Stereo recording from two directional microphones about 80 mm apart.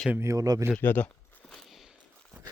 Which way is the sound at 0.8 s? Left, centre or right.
Left.